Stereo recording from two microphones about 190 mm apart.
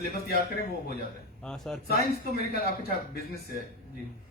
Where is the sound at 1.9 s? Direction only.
55° left (ahead or behind).